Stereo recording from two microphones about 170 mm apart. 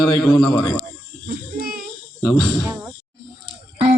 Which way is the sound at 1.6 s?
60° right (ahead or behind).